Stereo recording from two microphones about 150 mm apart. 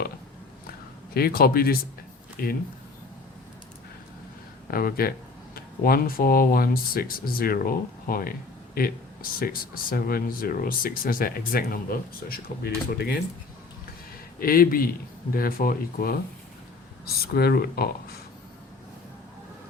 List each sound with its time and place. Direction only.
1.1 s speech: 85° left
4.7 s speech: 75° left (ahead or behind)
14.3 s speech: 75° left (ahead or behind)
17.3 s speech: 90° left